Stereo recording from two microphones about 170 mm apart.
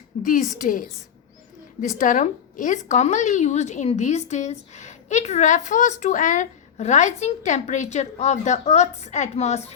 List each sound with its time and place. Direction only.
0.2 s a woman's voice: 50° left (ahead or behind)
2.0 s a woman's voice: 50° left (ahead or behind)